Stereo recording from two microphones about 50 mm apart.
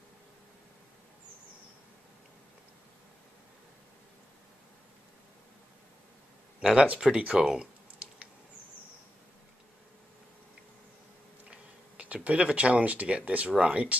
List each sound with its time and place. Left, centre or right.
6.6 s speech: centre
7.2 s computer keyboard: centre
11.5 s speech: right